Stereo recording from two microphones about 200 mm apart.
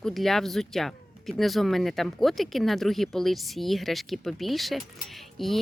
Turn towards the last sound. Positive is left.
turn(degrees=0)  # may be behind; listen again after turning